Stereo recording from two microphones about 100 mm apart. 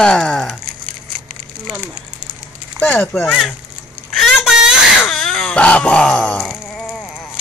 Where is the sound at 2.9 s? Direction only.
15° left (ahead or behind).